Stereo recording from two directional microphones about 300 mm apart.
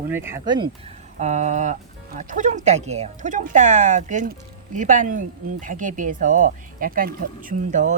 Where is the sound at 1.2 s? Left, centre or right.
Right.